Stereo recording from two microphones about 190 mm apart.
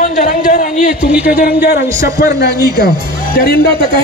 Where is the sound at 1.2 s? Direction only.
50° left (ahead or behind).